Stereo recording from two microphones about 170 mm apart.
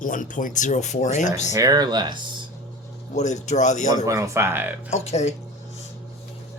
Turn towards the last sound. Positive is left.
turn(degrees=40)  # may be behind; listen again after turning